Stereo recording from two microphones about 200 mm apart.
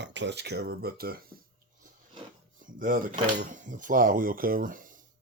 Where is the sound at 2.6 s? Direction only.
40° right (ahead or behind).